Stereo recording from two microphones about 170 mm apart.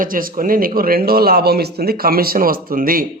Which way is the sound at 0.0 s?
55° right (ahead or behind).